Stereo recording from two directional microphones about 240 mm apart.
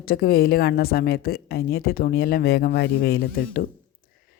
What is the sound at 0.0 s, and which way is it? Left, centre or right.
Speech, left.